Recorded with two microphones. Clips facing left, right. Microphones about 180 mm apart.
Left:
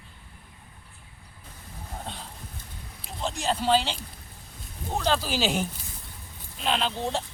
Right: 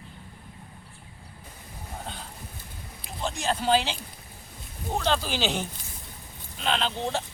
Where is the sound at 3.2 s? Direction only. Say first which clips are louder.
Even; centre (ahead or behind).